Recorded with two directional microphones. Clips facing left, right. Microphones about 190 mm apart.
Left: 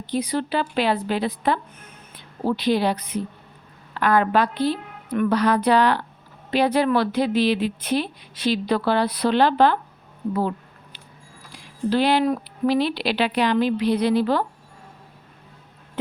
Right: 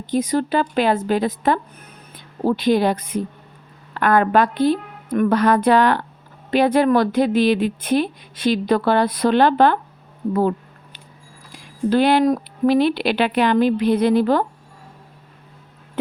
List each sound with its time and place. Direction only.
0.0 s a woman's voice: 45° right (ahead or behind)
11.9 s a woman's voice: 50° right (ahead or behind)